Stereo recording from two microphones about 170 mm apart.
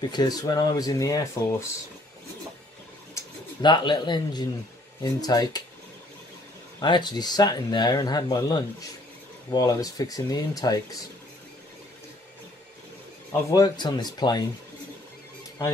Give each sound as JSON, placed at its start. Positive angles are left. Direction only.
{"t": 0.0, "sound": "speech", "side_deg": 25}
{"t": 3.2, "sound": "speech", "side_deg": 25}
{"t": 6.8, "sound": "speech", "side_deg": 25}
{"t": 13.5, "sound": "speech", "side_deg": 20}